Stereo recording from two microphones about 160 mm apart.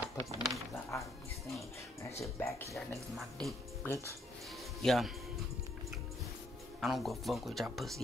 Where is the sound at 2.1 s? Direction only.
15° left (ahead or behind).